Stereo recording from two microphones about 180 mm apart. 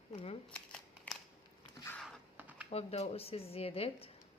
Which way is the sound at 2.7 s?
35° left (ahead or behind).